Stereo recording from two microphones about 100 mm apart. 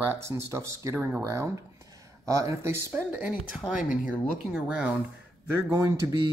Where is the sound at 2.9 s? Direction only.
15° right (ahead or behind).